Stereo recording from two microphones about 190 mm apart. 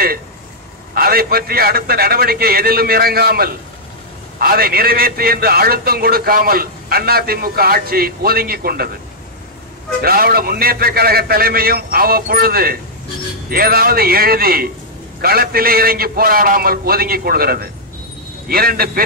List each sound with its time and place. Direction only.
0.9 s a man's voice: 55° right (ahead or behind)
10.0 s a man's voice: 50° right (ahead or behind)